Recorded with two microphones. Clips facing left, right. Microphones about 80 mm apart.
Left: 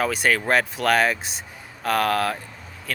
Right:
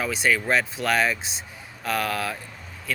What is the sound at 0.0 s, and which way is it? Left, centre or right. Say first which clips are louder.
Speech: left 2 dB; left.